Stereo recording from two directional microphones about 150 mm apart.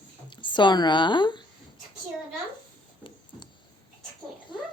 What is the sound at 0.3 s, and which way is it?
Speech, 30° left (ahead or behind).